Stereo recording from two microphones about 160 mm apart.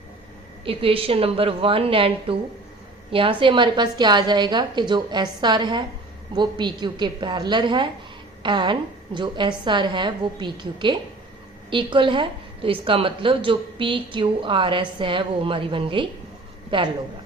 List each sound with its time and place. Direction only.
0.6 s a woman's voice: 35° right (ahead or behind)